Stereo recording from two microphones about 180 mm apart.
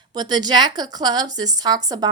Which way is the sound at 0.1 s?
25° right (ahead or behind).